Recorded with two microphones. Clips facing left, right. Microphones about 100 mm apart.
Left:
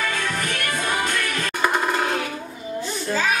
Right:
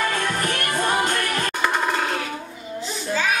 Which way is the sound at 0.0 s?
40° right (ahead or behind).